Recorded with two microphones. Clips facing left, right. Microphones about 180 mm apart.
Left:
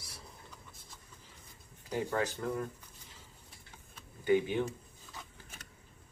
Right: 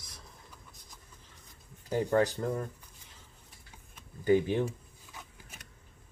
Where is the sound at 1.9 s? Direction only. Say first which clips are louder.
Right 6 dB; 40° right (ahead or behind).